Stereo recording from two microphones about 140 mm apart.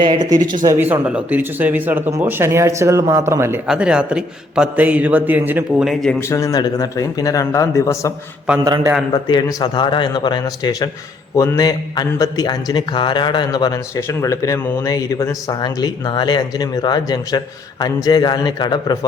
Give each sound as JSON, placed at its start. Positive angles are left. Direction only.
{"t": 0.0, "sound": "speech", "side_deg": -30}
{"t": 0.6, "sound": "speech", "side_deg": -20}
{"t": 3.7, "sound": "speech", "side_deg": -5}
{"t": 5.8, "sound": "speech", "side_deg": 0}
{"t": 6.1, "sound": "a man's voice", "side_deg": 20}
{"t": 9.1, "sound": "a man's voice", "side_deg": 30}